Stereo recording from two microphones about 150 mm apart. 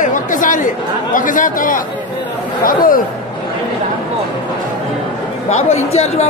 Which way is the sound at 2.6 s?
70° left (ahead or behind).